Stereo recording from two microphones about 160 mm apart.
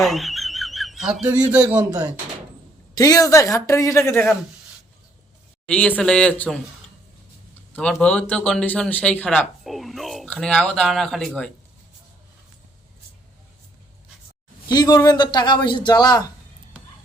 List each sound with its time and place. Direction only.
0.0 s a sound: centre (ahead or behind)
1.6 s a man's voice: 25° right (ahead or behind)
2.9 s a man's voice: 20° left (ahead or behind)
5.6 s a man's voice: 10° left (ahead or behind)
7.8 s a man's voice: 5° left (ahead or behind)
14.7 s a man's voice: 25° left (ahead or behind)